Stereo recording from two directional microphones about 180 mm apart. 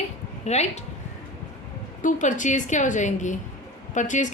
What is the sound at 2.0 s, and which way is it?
A woman's voice, 45° left (ahead or behind).